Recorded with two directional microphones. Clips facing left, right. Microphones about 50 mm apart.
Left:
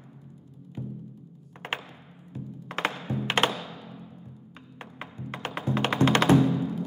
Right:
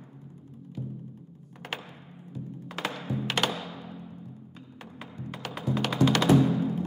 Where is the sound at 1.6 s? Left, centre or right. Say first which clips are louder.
Left 3 dB; left.